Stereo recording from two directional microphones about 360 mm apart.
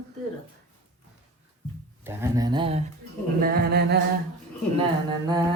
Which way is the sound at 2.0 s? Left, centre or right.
Centre.